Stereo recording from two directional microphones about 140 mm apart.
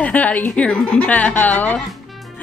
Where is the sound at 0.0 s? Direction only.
10° left (ahead or behind).